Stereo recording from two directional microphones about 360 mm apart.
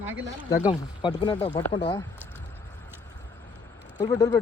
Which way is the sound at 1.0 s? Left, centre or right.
Centre.